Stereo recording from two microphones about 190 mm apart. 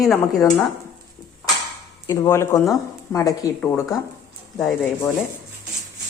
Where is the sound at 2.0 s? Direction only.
15° left (ahead or behind).